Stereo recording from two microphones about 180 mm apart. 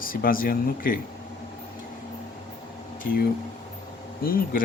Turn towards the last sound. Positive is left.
turn(degrees=55)  # may be behind; listen again after turning